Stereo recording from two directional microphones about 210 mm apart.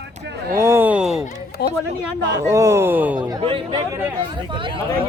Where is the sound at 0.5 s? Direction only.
10° right (ahead or behind).